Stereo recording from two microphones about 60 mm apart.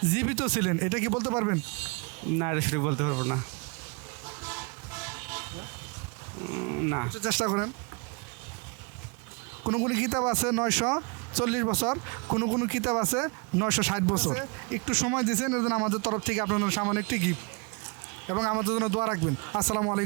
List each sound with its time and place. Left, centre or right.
0.0 s speech: centre
4.3 s vehicle: centre
6.4 s speech: right
7.1 s speech: centre
9.6 s speech: centre